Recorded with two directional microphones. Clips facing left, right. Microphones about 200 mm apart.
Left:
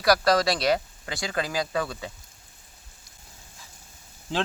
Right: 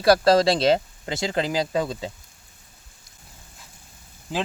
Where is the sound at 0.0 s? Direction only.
25° right (ahead or behind).